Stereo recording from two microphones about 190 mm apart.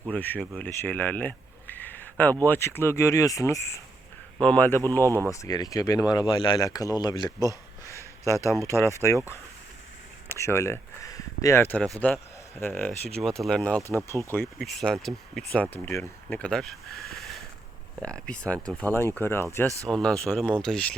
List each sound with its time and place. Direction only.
0.1 s speech: 10° left (ahead or behind)
7.4 s a sound: 15° left (ahead or behind)
8.6 s speech: 15° left (ahead or behind)
14.6 s speech: centre (ahead or behind)
19.6 s speech: 15° right (ahead or behind)
19.9 s speech: 5° left (ahead or behind)